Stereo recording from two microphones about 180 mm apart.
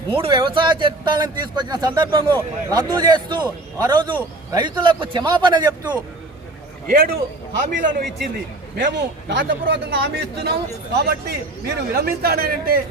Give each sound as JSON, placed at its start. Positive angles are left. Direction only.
{"t": 0.1, "sound": "speech", "side_deg": -30}
{"t": 6.8, "sound": "a man's voice", "side_deg": -55}
{"t": 8.7, "sound": "a man's voice", "side_deg": -75}